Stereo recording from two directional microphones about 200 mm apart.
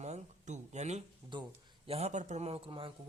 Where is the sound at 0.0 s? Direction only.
35° right (ahead or behind).